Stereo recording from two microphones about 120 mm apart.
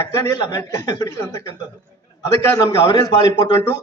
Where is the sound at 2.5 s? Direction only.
30° left (ahead or behind).